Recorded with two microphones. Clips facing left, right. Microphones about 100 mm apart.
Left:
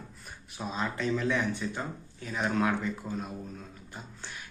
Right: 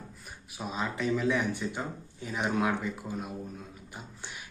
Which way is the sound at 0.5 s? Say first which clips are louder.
Even; 5° right (ahead or behind).